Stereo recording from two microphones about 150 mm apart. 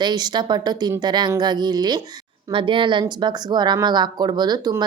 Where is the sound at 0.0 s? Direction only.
30° right (ahead or behind).